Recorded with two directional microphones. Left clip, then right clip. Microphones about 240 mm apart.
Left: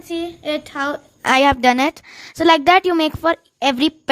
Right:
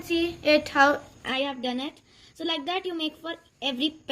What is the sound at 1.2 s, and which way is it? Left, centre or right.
A woman's voice, left.